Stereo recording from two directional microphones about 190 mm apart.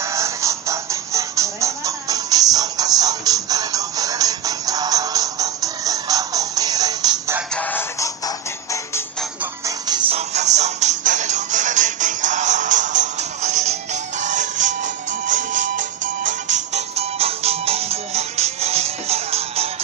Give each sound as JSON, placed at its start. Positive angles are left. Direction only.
{"t": 0.0, "sound": "music", "side_deg": -15}
{"t": 7.5, "sound": "music", "side_deg": 10}
{"t": 9.4, "sound": "music", "side_deg": -20}